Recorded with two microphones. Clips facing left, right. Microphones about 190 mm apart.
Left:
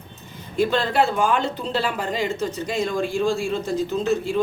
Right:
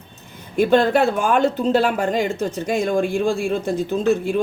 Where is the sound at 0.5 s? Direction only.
50° right (ahead or behind).